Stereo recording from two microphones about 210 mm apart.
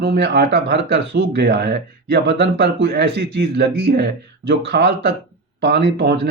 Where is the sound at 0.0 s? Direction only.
50° right (ahead or behind).